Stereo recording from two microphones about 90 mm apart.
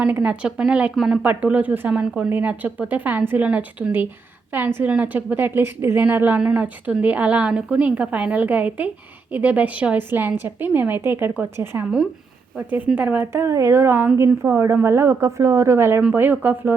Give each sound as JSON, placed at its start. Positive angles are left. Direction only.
{"t": 0.0, "sound": "a woman's voice", "side_deg": -15}
{"t": 1.2, "sound": "a woman's voice", "side_deg": -15}
{"t": 13.4, "sound": "a woman's voice", "side_deg": -35}